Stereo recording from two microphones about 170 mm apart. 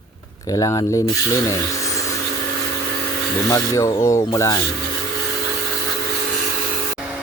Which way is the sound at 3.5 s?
20° left (ahead or behind).